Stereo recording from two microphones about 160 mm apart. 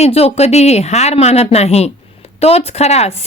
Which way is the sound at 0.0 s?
40° left (ahead or behind).